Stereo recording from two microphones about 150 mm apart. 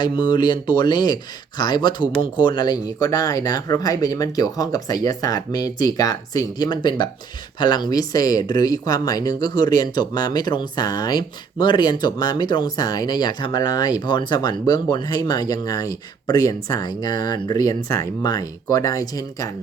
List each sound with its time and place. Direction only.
0.0 s speech: 30° left (ahead or behind)